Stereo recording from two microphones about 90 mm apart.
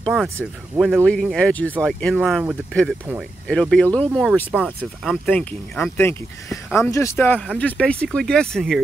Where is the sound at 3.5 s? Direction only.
10° left (ahead or behind).